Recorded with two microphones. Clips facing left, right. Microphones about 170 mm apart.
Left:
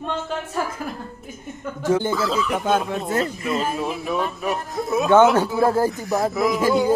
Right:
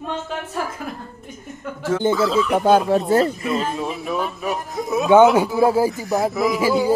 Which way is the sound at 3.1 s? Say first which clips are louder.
Right 6 dB; 35° right (ahead or behind).